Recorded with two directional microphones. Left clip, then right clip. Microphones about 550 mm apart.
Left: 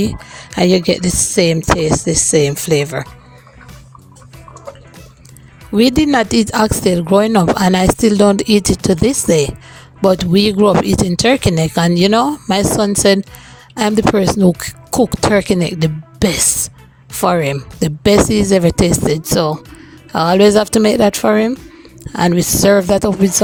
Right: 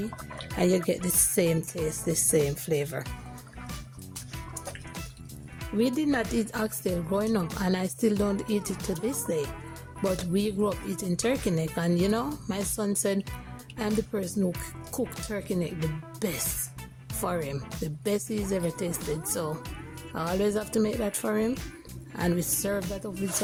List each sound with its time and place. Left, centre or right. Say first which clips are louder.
0.5 s speech: left 13 dB; centre
5.7 s speech: left 15 dB; centre